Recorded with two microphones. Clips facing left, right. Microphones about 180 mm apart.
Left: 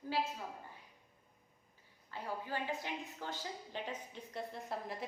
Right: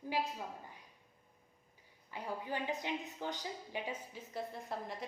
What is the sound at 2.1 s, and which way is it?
A woman's voice, 15° right (ahead or behind).